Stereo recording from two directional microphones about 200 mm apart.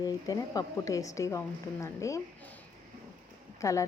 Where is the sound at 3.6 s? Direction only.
15° left (ahead or behind).